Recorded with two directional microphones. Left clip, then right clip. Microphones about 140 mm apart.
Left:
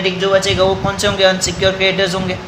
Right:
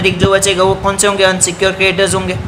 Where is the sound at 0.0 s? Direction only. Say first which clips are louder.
Right 3 dB; 50° right (ahead or behind).